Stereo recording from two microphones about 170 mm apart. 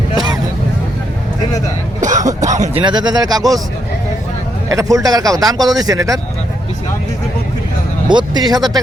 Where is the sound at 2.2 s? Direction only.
20° right (ahead or behind).